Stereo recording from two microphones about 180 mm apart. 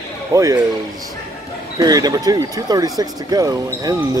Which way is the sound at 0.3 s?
20° right (ahead or behind).